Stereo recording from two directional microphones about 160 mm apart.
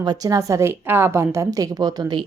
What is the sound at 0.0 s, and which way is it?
A woman's voice, 25° right (ahead or behind).